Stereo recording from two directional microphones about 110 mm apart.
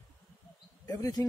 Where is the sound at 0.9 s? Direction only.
30° left (ahead or behind).